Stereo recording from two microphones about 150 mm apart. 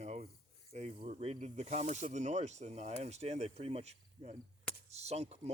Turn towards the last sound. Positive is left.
turn(degrees=-45)  # may be behind; listen again after turning